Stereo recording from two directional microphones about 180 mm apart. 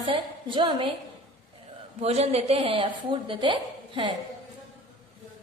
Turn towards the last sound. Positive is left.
turn(degrees=-25)  # may be behind; listen again after turning